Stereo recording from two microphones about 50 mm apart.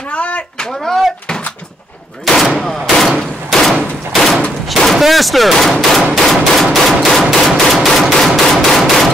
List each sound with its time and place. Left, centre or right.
0.1 s a sound: left
2.2 s gunshot: centre
4.6 s speech: centre
6.2 s machine gun: centre